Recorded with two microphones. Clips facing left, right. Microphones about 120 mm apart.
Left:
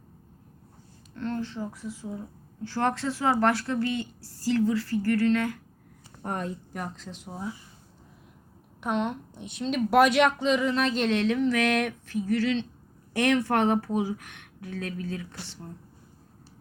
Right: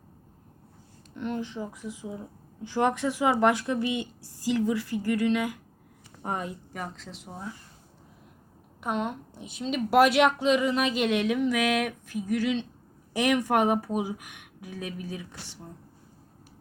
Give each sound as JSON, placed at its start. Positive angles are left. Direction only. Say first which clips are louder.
{"t": 1.1, "sound": "speech", "louder": "even", "side_deg": -15}
{"t": 8.8, "sound": "speech", "louder": "left 2 dB", "side_deg": -5}